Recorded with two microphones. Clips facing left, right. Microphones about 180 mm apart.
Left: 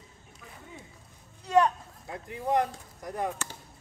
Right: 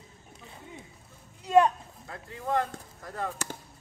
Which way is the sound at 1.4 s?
15° right (ahead or behind).